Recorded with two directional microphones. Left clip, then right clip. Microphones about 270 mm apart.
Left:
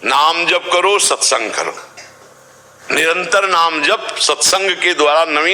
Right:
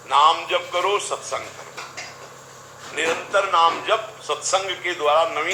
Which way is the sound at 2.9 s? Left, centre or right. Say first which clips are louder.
Left 8 dB; left.